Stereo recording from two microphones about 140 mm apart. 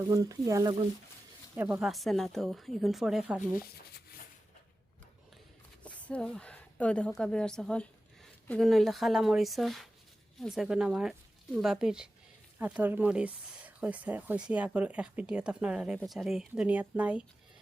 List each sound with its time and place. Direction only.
0.0 s speech: 25° right (ahead or behind)
1.5 s speech: 15° right (ahead or behind)
1.8 s a woman's voice: centre (ahead or behind)
5.8 s a woman's voice: 10° left (ahead or behind); by 17.2 s 10° right (ahead or behind)